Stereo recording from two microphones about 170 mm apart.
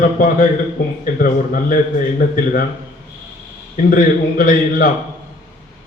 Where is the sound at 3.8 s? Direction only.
55° left (ahead or behind).